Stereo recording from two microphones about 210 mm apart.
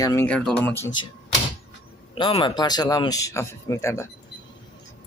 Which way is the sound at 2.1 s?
25° left (ahead or behind).